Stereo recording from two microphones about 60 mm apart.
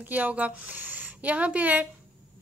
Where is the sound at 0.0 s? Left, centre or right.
Right.